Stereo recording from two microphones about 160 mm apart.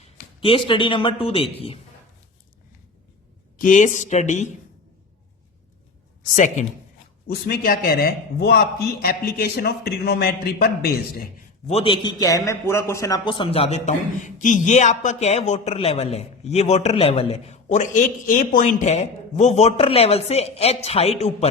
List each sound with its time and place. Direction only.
0.3 s a man's voice: 35° left (ahead or behind)
3.6 s speech: 55° left (ahead or behind)
6.3 s speech: 50° left (ahead or behind)
7.3 s a man's voice: 75° left (ahead or behind)
11.7 s a man's voice: 35° left (ahead or behind)